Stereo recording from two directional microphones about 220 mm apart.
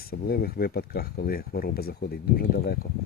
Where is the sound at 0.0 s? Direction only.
45° left (ahead or behind).